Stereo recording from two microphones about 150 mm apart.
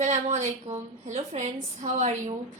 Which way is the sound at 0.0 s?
50° right (ahead or behind).